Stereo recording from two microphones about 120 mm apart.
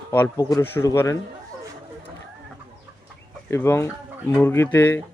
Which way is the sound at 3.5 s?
20° left (ahead or behind).